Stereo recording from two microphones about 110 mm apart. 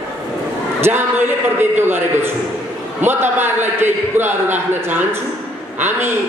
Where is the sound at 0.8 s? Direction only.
20° right (ahead or behind).